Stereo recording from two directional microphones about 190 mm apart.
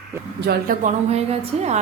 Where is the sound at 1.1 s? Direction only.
35° right (ahead or behind).